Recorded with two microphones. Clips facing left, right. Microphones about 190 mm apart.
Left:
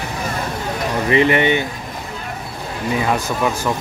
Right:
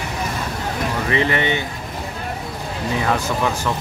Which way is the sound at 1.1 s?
15° left (ahead or behind).